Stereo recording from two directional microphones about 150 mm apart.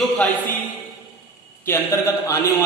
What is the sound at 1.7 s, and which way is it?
Speech, 15° left (ahead or behind).